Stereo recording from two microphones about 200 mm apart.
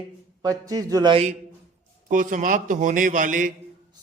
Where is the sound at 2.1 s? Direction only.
40° right (ahead or behind).